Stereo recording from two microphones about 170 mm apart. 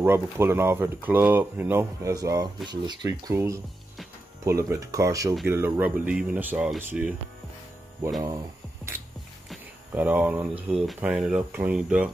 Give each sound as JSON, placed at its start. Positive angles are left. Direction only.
{"t": 0.0, "sound": "speech", "side_deg": -15}
{"t": 9.5, "sound": "speech", "side_deg": -10}